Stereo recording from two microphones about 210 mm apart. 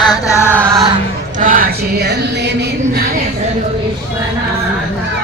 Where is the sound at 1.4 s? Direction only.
40° right (ahead or behind).